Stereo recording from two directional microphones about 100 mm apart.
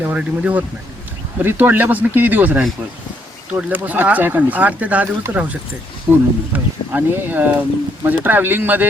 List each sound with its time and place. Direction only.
0.0 s speech: 15° right (ahead or behind)